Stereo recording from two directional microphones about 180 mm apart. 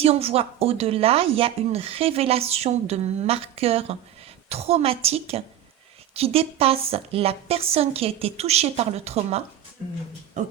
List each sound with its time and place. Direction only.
0.0 s speech: 35° right (ahead or behind)